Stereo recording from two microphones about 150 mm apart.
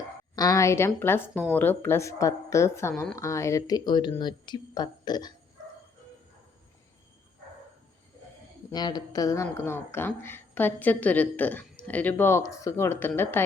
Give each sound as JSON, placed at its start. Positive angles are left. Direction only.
{"t": 0.3, "sound": "speech", "side_deg": 25}
{"t": 8.7, "sound": "speech", "side_deg": 25}